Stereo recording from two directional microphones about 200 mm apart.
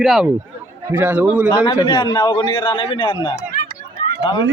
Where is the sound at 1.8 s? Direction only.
25° left (ahead or behind).